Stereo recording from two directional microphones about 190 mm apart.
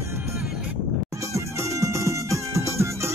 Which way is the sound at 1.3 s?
15° right (ahead or behind).